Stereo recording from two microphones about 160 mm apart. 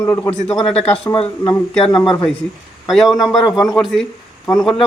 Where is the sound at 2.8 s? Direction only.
Centre (ahead or behind).